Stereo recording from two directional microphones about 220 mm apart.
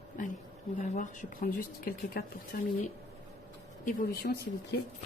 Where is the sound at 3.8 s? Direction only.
40° left (ahead or behind).